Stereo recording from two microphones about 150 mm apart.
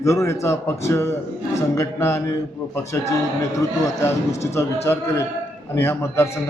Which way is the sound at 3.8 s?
20° left (ahead or behind).